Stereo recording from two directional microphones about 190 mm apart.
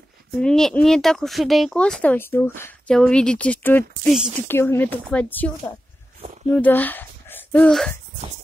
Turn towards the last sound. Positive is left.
turn(degrees=5)  # may be behind; listen again after turning